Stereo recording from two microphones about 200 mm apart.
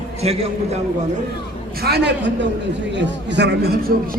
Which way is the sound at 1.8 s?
55° right (ahead or behind).